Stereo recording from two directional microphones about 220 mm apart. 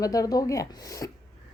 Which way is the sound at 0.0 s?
15° left (ahead or behind).